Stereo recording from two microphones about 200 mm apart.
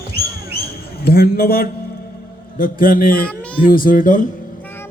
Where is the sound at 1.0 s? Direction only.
50° left (ahead or behind).